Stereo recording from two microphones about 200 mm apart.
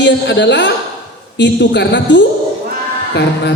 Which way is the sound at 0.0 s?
60° left (ahead or behind).